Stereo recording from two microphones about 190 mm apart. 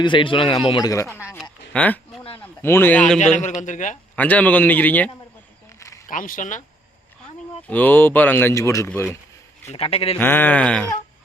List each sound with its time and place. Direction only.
0.0 s speech: 25° left (ahead or behind)
1.4 s a sound: 5° left (ahead or behind)
3.2 s a man's voice: 40° left (ahead or behind)
4.1 s speech: 5° left (ahead or behind)
6.1 s speech: 45° left (ahead or behind)
7.7 s speech: 10° left (ahead or behind)
9.7 s a man's voice: 30° left (ahead or behind)
10.2 s speech: 10° left (ahead or behind)